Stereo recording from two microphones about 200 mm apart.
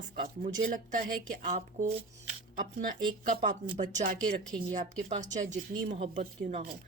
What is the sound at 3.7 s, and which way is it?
Speech, 40° right (ahead or behind).